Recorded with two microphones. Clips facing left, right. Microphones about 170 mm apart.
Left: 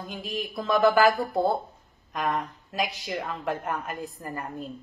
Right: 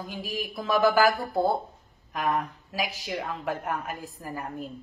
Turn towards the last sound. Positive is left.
turn(degrees=-5)  # may be behind; listen again after turning